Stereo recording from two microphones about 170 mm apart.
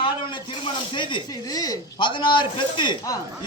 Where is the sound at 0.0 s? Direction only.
30° left (ahead or behind).